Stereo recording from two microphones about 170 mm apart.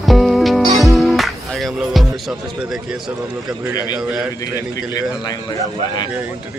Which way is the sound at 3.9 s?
10° right (ahead or behind).